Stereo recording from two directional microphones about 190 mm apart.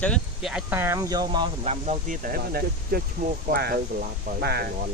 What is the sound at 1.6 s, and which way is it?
Speech, 35° right (ahead or behind).